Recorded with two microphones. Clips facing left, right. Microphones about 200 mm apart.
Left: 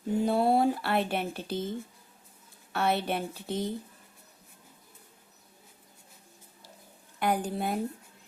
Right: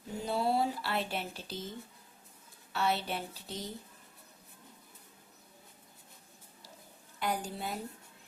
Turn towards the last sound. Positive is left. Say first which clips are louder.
# left 7 dB
turn(degrees=55)  # may be behind; listen again after turning